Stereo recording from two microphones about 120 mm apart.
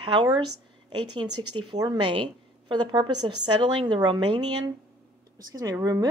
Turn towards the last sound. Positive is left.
turn(degrees=-30)  # may be behind; listen again after turning